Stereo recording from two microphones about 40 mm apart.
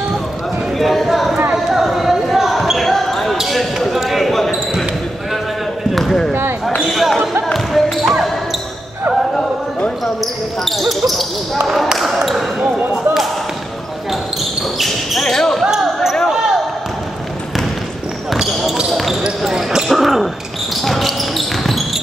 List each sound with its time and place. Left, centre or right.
0.7 s a sound: centre
1.7 s chatter: centre
2.3 s basketball bounce: centre
5.9 s basketball bounce: centre
10.6 s speech: centre
12.6 s speech: right
14.8 s speech: centre
15.6 s basketball bounce: centre
18.9 s basketball bounce: centre
19.4 s speech: centre
19.9 s speech: centre